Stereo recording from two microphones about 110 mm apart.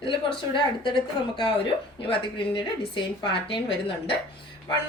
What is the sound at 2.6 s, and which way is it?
A woman's voice, 50° left (ahead or behind).